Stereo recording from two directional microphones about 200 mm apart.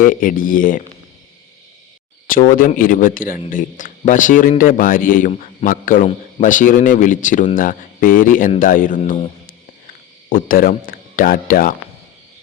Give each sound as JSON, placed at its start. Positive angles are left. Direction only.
{"t": 0.0, "sound": "speech", "side_deg": 45}
{"t": 2.2, "sound": "speech", "side_deg": 45}
{"t": 5.3, "sound": "a man's voice", "side_deg": 30}
{"t": 5.6, "sound": "a man's voice", "side_deg": 45}
{"t": 10.2, "sound": "speech", "side_deg": 45}